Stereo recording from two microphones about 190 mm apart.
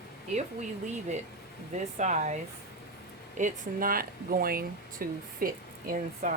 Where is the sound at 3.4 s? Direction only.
45° right (ahead or behind).